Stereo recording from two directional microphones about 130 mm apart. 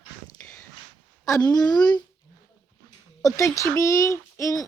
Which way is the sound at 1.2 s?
30° left (ahead or behind).